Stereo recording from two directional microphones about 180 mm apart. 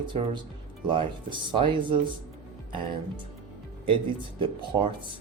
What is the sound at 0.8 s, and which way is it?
Speech, 25° right (ahead or behind).